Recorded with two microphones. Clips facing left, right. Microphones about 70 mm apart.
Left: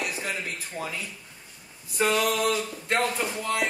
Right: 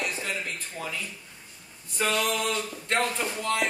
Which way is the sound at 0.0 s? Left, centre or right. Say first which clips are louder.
Even; centre.